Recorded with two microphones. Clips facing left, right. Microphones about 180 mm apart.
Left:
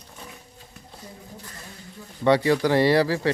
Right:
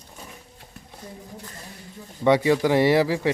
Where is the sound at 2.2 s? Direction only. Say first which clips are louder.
Right 1 dB; 15° right (ahead or behind).